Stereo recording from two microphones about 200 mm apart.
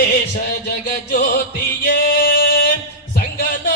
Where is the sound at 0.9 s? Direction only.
45° left (ahead or behind).